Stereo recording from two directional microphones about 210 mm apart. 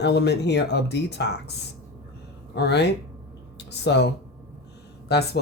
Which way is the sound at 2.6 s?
55° left (ahead or behind).